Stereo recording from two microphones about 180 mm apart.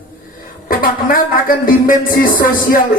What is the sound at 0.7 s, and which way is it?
Speech, 50° left (ahead or behind).